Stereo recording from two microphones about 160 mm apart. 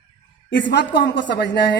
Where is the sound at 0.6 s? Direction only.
90° left.